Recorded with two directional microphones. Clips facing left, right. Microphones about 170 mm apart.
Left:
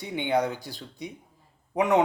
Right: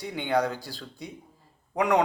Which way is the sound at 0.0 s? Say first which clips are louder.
Left 1 dB; 20° left (ahead or behind).